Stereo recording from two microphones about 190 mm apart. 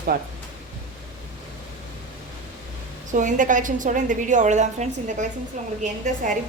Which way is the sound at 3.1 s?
40° right (ahead or behind).